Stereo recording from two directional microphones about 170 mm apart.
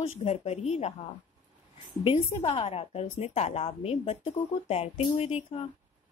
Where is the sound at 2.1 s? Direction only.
40° left (ahead or behind).